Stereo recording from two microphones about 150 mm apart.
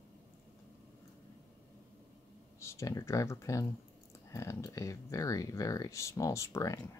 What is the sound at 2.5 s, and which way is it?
Speech, 20° left (ahead or behind).